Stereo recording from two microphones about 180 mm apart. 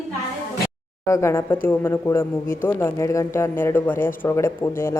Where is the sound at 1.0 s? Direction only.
15° left (ahead or behind).